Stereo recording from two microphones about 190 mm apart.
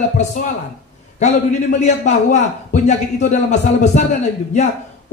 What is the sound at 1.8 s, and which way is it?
A man's voice, 40° left (ahead or behind).